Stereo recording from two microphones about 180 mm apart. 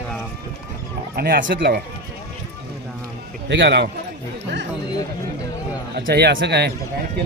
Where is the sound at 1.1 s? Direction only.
60° right (ahead or behind).